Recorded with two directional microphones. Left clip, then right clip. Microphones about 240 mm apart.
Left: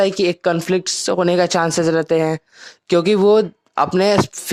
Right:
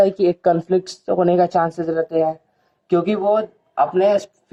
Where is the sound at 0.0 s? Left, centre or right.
Left.